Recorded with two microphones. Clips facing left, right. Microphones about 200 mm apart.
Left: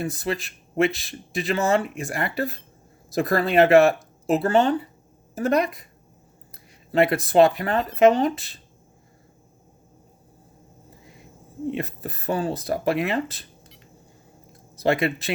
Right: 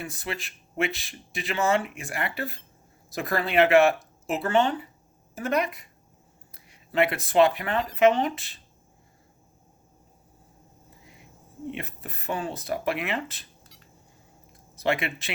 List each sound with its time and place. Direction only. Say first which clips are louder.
0.0 s speech: left 7 dB; 40° left (ahead or behind)
11.7 s speech: left 7 dB; 35° left (ahead or behind)
14.8 s speech: left 5 dB; 35° left (ahead or behind)